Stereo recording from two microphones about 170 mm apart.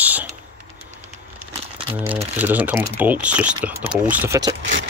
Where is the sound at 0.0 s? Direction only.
10° right (ahead or behind).